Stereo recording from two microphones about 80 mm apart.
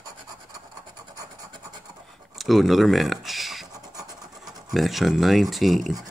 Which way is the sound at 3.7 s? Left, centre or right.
Right.